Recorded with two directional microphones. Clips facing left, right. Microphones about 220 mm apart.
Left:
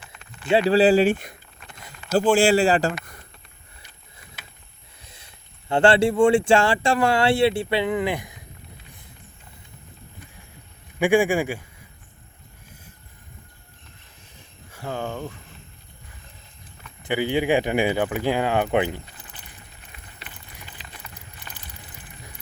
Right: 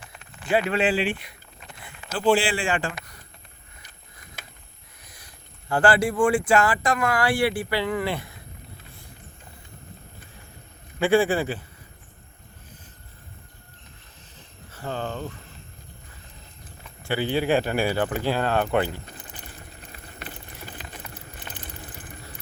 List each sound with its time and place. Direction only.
0.4 s speech: 30° left (ahead or behind)
2.9 s speech: 50° left (ahead or behind)
5.0 s speech: 25° left (ahead or behind)
11.0 s a man's voice: 15° left (ahead or behind)
14.7 s speech: 10° left (ahead or behind)
17.0 s speech: 15° left (ahead or behind)
19.9 s clip-clop: 40° right (ahead or behind)